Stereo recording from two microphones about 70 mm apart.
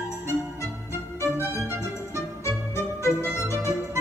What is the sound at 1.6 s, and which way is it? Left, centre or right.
Music, right.